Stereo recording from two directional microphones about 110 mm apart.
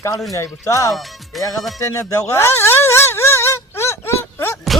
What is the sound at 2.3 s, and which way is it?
Wail, 25° left (ahead or behind).